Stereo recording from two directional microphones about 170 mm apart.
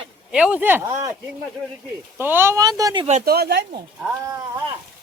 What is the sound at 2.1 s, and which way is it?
Speech, 10° right (ahead or behind).